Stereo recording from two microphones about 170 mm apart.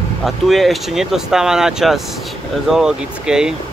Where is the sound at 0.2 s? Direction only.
Centre (ahead or behind).